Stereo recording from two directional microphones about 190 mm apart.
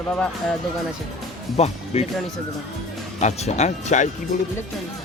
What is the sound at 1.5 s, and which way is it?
Speech, 35° left (ahead or behind).